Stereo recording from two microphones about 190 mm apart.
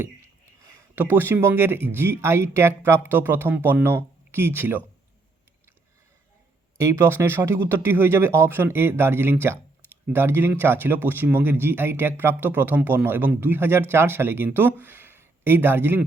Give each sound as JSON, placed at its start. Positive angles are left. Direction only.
{"t": 0.9, "sound": "speech", "side_deg": -10}
{"t": 6.7, "sound": "speech", "side_deg": -15}